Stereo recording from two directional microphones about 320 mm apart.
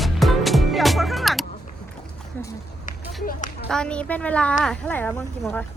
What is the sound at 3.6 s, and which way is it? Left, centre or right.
Speech, centre.